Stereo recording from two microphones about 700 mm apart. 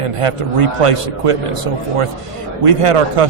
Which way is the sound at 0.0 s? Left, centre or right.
Right.